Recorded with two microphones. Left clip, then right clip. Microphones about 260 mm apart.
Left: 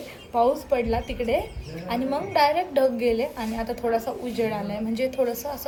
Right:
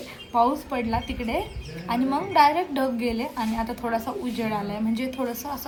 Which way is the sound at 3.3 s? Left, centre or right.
Centre.